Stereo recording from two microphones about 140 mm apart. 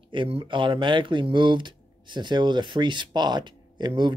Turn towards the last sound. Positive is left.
turn(degrees=-35)  # may be behind; listen again after turning